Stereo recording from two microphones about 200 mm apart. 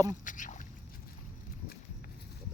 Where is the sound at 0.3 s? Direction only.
40° left (ahead or behind).